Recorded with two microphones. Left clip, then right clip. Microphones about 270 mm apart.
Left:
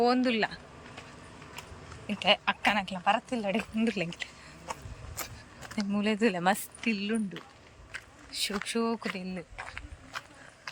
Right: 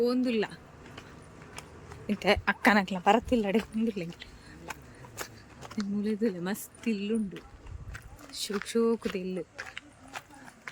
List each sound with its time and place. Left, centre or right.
0.0 s speech: centre
2.1 s speech: centre
3.8 s speech: centre
7.9 s walk: centre
8.6 s speech: centre
9.6 s run: centre